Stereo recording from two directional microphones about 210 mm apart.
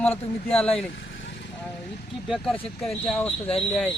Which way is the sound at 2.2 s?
Centre (ahead or behind).